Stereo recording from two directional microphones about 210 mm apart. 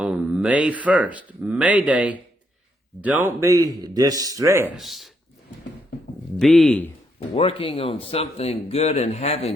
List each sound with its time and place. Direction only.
0.0 s a man's voice: 5° right (ahead or behind)
4.8 s speech: centre (ahead or behind)
6.4 s speech: centre (ahead or behind)
7.2 s speech: 25° left (ahead or behind)